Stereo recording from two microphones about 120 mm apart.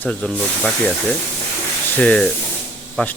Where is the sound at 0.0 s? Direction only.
5° left (ahead or behind).